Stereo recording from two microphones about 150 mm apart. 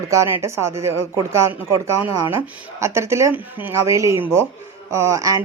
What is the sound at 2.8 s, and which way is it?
Speech, 15° right (ahead or behind).